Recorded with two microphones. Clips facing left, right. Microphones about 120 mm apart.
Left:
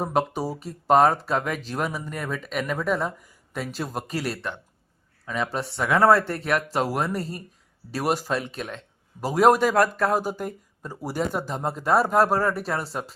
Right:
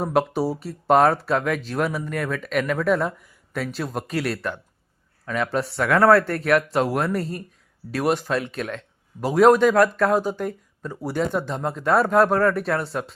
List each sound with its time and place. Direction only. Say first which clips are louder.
0.0 s a man's voice: right 3 dB; centre (ahead or behind)
9.7 s speech: right 3 dB; 35° left (ahead or behind)
10.2 s a man's voice: right 3 dB; 10° left (ahead or behind)